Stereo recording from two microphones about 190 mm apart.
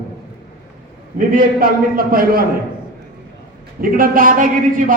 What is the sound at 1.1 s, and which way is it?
A man's voice, 45° right (ahead or behind).